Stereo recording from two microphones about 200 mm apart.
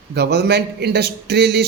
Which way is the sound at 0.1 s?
55° right (ahead or behind).